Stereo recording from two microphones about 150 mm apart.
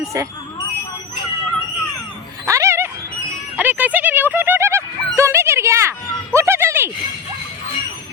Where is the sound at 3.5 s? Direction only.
10° right (ahead or behind).